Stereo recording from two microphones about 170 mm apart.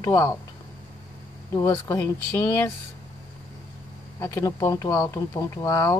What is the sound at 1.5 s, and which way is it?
Speech, 15° left (ahead or behind).